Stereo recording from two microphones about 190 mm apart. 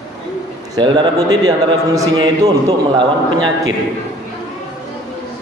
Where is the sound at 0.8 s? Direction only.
20° right (ahead or behind).